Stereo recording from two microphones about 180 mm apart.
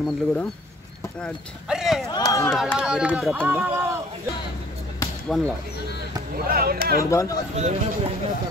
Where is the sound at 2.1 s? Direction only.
20° left (ahead or behind).